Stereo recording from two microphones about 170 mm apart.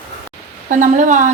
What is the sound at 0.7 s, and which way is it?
Speech, 45° right (ahead or behind).